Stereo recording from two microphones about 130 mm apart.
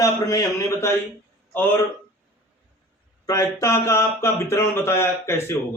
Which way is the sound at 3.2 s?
25° left (ahead or behind).